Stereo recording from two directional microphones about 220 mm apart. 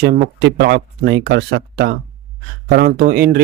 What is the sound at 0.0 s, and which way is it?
Speech, 45° right (ahead or behind).